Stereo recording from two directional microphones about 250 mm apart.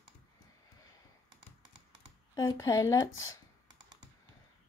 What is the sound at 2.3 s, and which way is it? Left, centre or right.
Speech, centre.